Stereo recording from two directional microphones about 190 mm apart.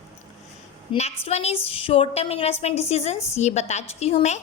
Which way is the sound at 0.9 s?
35° left (ahead or behind).